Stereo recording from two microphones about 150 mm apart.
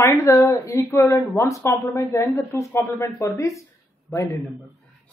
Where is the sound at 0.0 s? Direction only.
20° left (ahead or behind).